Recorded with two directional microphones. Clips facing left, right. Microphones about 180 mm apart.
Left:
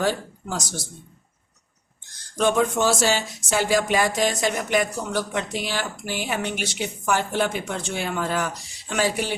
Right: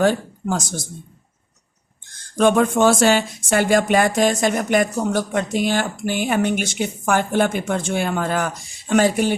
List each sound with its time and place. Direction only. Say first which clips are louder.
0.0 s speech: right 6 dB; 50° right (ahead or behind)
2.4 s speech: right 5 dB; 55° right (ahead or behind)